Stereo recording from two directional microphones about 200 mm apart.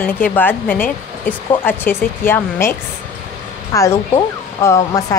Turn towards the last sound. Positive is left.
turn(degrees=15)  # may be behind; listen again after turning